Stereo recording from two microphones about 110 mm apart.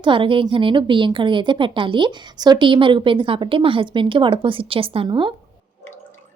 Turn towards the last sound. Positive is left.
turn(degrees=-45)  # may be behind; listen again after turning